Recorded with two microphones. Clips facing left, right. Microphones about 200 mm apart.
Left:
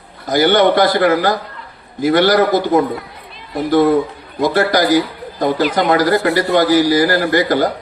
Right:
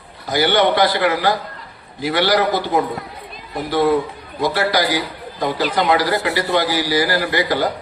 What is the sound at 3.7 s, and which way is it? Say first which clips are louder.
A man's voice: left 4 dB; 45° left (ahead or behind).